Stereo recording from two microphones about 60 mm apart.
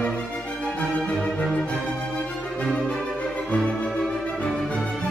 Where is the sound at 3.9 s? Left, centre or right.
Centre.